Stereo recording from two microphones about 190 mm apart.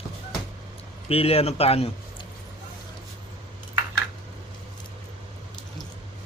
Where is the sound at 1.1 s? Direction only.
30° left (ahead or behind).